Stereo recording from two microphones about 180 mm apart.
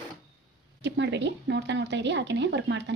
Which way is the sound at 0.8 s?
75° right (ahead or behind).